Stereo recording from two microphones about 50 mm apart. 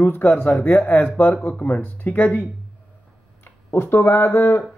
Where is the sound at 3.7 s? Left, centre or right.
Left.